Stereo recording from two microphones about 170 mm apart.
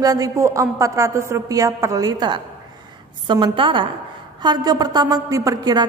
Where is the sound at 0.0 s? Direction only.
20° right (ahead or behind).